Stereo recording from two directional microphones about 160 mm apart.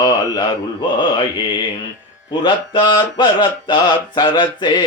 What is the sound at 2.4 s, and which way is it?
Mantra, 30° left (ahead or behind).